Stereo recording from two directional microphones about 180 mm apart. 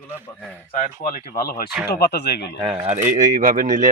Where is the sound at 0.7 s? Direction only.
45° left (ahead or behind); by 2.4 s 65° left (ahead or behind).